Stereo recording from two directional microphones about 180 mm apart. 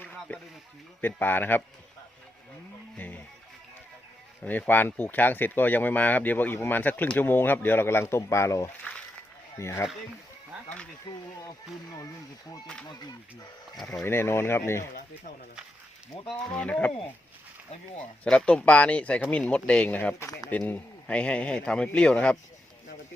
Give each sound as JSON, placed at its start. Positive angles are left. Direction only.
{"t": 0.0, "sound": "a sound", "side_deg": 10}
{"t": 1.0, "sound": "speech", "side_deg": 10}
{"t": 4.4, "sound": "speech", "side_deg": 10}
{"t": 12.9, "sound": "speech", "side_deg": 25}
{"t": 16.3, "sound": "speech", "side_deg": 5}
{"t": 18.2, "sound": "speech", "side_deg": 5}